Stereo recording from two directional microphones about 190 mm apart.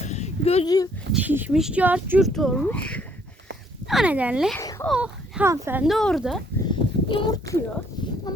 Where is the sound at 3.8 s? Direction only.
5° right (ahead or behind).